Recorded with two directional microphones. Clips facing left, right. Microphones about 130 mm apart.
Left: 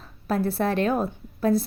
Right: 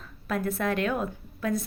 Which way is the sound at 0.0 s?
35° left (ahead or behind).